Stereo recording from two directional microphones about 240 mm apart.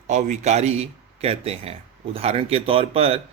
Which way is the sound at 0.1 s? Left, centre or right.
Right.